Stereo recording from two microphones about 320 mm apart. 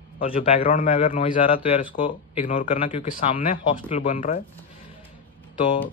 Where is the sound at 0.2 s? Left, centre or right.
Left.